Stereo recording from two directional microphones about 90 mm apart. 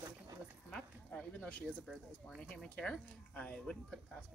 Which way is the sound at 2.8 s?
10° left (ahead or behind).